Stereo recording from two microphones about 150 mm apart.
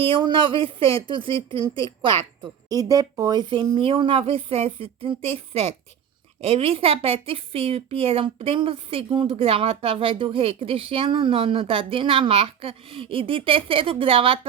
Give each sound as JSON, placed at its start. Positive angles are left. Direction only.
{"t": 0.1, "sound": "a woman's voice", "side_deg": -35}
{"t": 2.4, "sound": "a woman's voice", "side_deg": -25}